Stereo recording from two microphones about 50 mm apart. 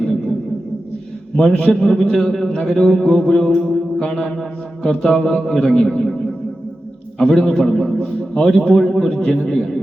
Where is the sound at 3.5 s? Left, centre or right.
Centre.